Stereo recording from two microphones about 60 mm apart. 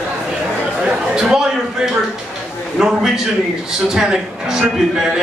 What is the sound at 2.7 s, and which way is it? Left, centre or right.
A man's voice, centre.